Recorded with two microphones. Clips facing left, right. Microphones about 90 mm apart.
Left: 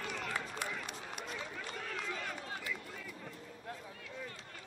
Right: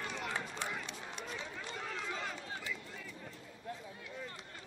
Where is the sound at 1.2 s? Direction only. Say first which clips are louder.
Even; 25° right (ahead or behind).